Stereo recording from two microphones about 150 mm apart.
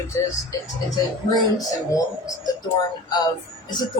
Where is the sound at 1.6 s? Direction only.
25° left (ahead or behind).